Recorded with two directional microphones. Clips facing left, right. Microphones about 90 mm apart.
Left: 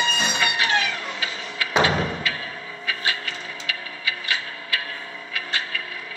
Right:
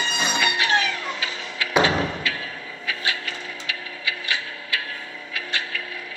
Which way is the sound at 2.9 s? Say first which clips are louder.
Even; 30° left (ahead or behind).